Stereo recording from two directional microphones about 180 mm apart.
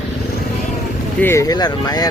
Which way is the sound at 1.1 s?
15° left (ahead or behind).